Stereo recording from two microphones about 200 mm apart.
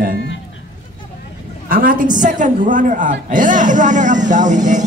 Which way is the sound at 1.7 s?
45° right (ahead or behind).